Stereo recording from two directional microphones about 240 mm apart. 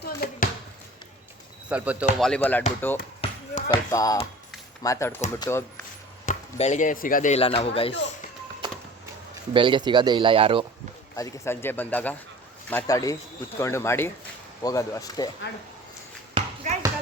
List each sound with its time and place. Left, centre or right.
0.0 s basketball bounce: left
1.7 s speech: centre
3.2 s basketball bounce: left
4.8 s speech: centre
6.2 s speech: left
9.5 s speech: centre
11.2 s speech: centre
16.4 s basketball bounce: right